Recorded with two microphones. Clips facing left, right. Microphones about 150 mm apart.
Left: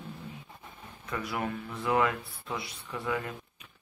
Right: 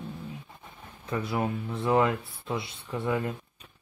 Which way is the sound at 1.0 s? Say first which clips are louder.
Right 4 dB; 25° right (ahead or behind).